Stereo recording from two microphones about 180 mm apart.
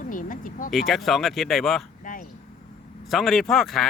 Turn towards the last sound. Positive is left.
turn(degrees=0)  # may be behind; listen again after turning